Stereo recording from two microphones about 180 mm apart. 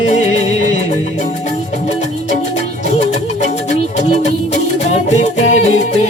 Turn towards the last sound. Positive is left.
turn(degrees=40)  # may be behind; listen again after turning